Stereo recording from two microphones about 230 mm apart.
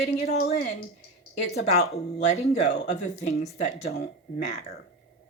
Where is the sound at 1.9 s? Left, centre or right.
Left.